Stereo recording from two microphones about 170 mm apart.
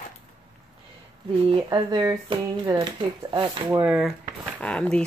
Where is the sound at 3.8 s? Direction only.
Centre (ahead or behind).